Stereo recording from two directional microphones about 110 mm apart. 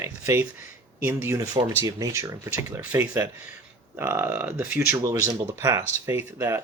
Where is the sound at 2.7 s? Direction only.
20° right (ahead or behind).